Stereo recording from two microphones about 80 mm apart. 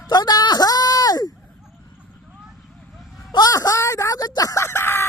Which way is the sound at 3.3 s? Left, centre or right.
Left.